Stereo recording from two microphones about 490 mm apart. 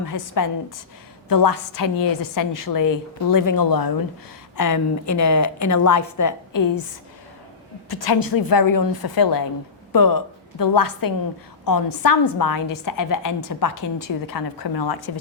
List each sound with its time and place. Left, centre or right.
0.0 s a woman's voice: left
7.9 s a woman's voice: left